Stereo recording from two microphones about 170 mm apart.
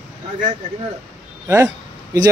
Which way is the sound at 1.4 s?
15° right (ahead or behind).